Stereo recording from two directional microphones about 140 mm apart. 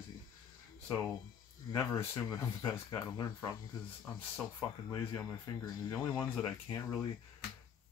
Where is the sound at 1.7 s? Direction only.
20° left (ahead or behind).